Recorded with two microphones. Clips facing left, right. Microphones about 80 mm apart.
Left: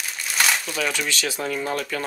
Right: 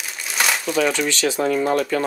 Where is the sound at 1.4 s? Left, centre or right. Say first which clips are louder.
Right 9 dB; right.